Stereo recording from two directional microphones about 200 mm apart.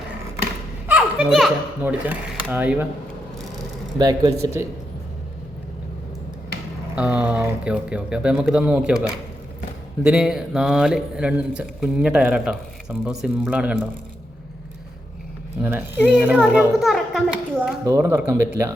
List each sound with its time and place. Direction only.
0.9 s speech: 5° right (ahead or behind)
3.9 s speech: 20° right (ahead or behind)
6.9 s a man's voice: 5° right (ahead or behind)
16.0 s a man's voice: 5° right (ahead or behind)
17.8 s speech: 15° right (ahead or behind)